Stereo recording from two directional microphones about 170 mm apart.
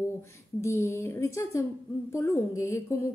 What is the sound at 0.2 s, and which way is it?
A woman's voice, 15° left (ahead or behind).